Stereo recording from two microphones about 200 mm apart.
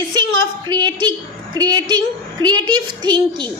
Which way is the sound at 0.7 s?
20° right (ahead or behind).